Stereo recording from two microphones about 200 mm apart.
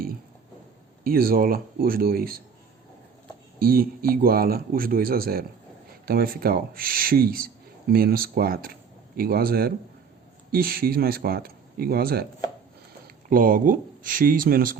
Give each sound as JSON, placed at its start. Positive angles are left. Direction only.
{"t": 1.0, "sound": "speech", "side_deg": -45}
{"t": 3.6, "sound": "speech", "side_deg": -50}
{"t": 13.3, "sound": "speech", "side_deg": -45}